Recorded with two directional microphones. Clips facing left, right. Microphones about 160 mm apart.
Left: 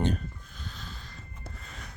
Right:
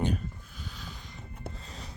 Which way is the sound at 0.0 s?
10° right (ahead or behind).